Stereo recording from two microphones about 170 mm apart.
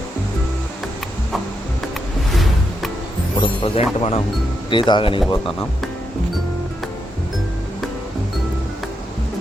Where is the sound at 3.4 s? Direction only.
30° left (ahead or behind).